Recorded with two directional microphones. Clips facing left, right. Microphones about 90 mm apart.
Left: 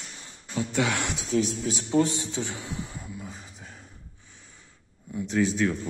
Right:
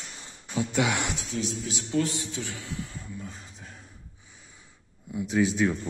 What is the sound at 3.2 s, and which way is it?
Speech, centre (ahead or behind).